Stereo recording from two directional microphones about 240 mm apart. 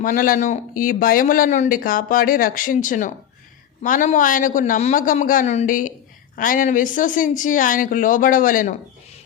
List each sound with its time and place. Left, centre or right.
0.0 s a woman's voice: left